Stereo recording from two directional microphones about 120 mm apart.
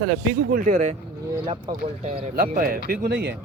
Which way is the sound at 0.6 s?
90° right.